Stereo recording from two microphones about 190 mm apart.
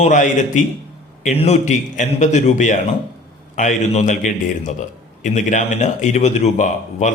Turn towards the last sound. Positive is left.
turn(degrees=40)  # may be behind; listen again after turning